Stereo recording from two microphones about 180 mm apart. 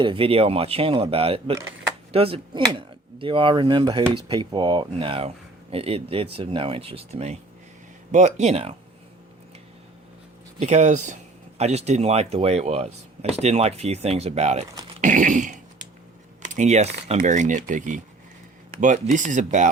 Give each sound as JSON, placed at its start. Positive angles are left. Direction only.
{"t": 0.0, "sound": "speech", "side_deg": -30}
{"t": 10.6, "sound": "speech", "side_deg": -40}
{"t": 15.0, "sound": "cough", "side_deg": -45}
{"t": 16.4, "sound": "speech", "side_deg": -40}